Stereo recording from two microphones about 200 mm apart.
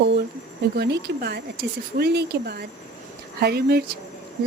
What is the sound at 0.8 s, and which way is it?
A woman's voice, 55° right (ahead or behind).